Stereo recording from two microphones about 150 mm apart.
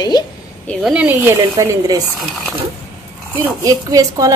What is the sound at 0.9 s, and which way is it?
Speech, 15° right (ahead or behind).